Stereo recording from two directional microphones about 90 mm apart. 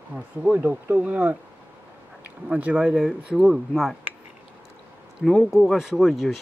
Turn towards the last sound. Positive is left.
turn(degrees=0)  # may be behind; listen again after turning